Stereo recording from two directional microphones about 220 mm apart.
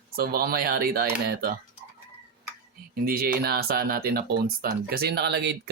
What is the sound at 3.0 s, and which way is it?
Speech, 45° right (ahead or behind).